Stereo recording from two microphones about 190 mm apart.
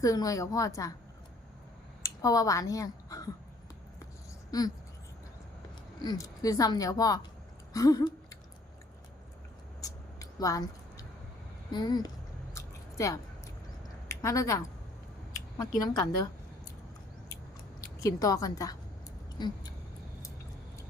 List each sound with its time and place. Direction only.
0.0 s a woman's voice: 20° left (ahead or behind)
2.0 s speech: 20° left (ahead or behind)
4.5 s speech: 20° left (ahead or behind)
6.0 s speech: 20° left (ahead or behind)
7.7 s a sound: 20° left (ahead or behind)
9.8 s a sound: 20° left (ahead or behind)
11.7 s speech: 20° left (ahead or behind)
12.5 s a sound: 15° left (ahead or behind)
15.8 s speech: 20° left (ahead or behind)
18.0 s speech: 20° left (ahead or behind)